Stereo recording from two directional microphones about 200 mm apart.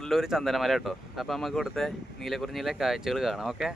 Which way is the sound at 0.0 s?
Centre (ahead or behind).